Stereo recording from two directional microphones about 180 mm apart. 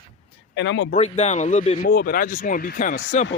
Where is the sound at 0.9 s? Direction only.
35° left (ahead or behind).